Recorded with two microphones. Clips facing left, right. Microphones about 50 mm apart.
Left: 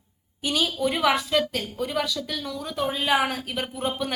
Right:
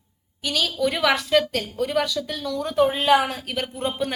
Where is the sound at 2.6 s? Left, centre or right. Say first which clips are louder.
Right 8 dB; right.